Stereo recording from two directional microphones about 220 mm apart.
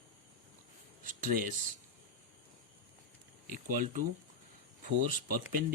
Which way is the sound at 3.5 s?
40° right (ahead or behind).